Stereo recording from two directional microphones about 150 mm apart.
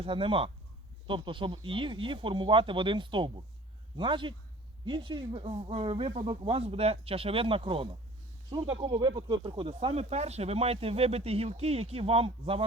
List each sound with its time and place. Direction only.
0.0 s speech: 35° right (ahead or behind)